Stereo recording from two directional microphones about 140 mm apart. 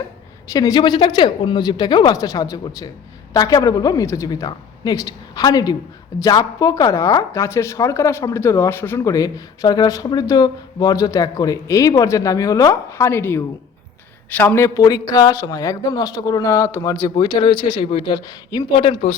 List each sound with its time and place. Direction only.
0.4 s a woman's voice: 25° left (ahead or behind)